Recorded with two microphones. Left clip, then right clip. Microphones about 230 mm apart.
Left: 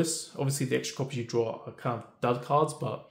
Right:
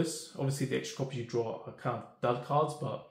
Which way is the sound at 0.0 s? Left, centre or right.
Left.